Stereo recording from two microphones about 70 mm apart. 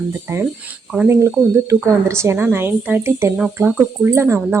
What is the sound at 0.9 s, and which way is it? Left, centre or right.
Speech, right.